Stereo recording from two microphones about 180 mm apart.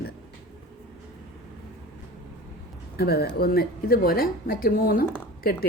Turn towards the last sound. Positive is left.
turn(degrees=55)  # may be behind; listen again after turning